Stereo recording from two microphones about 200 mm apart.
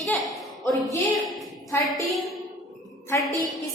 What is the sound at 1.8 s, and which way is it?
Speech, centre (ahead or behind).